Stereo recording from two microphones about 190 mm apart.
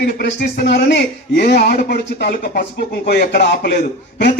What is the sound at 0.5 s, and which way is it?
A man's voice, 60° left (ahead or behind).